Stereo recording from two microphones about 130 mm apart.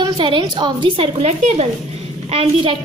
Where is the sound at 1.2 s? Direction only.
55° right (ahead or behind).